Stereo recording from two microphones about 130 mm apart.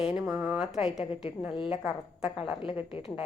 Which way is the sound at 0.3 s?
5° right (ahead or behind).